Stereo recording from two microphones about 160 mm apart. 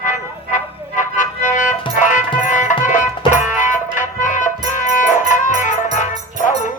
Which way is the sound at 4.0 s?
55° left (ahead or behind).